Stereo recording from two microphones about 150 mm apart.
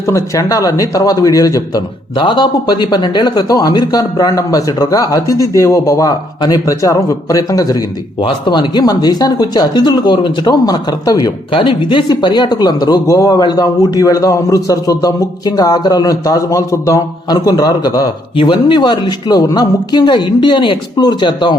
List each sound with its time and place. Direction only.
0.1 s speech: 20° left (ahead or behind)